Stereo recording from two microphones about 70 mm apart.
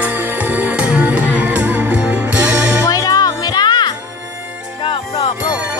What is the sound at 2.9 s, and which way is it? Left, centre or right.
Music, left.